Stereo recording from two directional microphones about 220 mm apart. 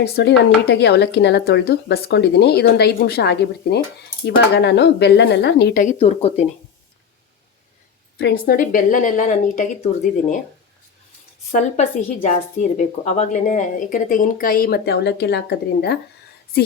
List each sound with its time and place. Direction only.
0.0 s speech: 50° left (ahead or behind); by 6.4 s 30° left (ahead or behind)
8.2 s speech: 40° left (ahead or behind)
12.3 s speech: 35° left (ahead or behind)